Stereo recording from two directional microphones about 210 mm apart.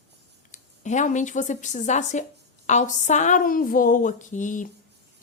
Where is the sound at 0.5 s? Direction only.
35° left (ahead or behind).